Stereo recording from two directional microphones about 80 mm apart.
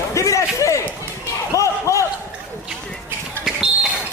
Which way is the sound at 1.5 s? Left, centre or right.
Left.